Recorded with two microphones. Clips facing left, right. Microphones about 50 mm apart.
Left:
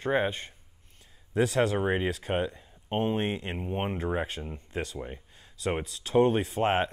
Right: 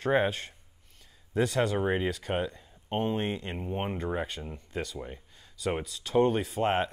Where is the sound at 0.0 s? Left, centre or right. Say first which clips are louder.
Right 1 dB; centre.